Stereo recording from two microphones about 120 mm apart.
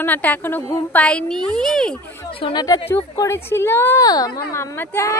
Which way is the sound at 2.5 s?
35° left (ahead or behind).